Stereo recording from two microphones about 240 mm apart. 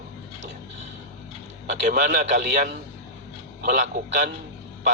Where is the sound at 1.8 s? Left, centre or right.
Right.